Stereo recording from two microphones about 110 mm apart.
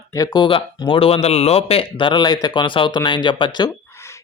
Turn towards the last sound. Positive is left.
turn(degrees=45)  # may be behind; listen again after turning